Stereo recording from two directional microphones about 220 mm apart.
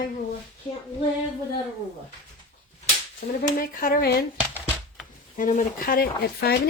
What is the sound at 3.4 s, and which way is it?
Speech, 40° left (ahead or behind).